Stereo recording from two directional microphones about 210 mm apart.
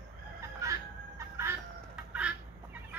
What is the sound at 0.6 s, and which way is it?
Music, 15° right (ahead or behind).